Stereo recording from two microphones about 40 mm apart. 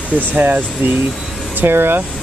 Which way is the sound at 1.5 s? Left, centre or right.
Right.